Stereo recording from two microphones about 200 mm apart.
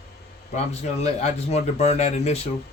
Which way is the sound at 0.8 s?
35° left (ahead or behind).